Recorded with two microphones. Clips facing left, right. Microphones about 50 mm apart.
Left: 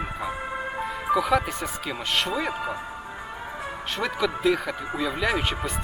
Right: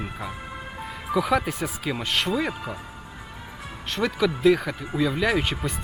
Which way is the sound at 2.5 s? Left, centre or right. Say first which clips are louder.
Left 4 dB; left.